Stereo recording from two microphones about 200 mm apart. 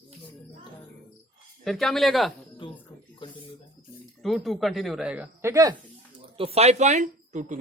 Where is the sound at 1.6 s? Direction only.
Centre (ahead or behind).